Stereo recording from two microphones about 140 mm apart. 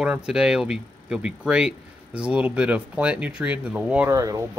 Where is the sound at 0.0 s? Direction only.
5° right (ahead or behind).